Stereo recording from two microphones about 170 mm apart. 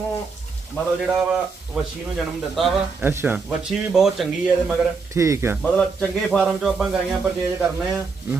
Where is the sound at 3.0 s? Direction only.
15° right (ahead or behind).